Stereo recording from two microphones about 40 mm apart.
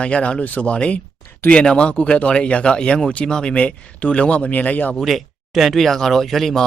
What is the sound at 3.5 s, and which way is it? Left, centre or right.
Speech, left.